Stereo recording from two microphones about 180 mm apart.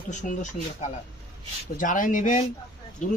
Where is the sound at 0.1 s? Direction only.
40° left (ahead or behind).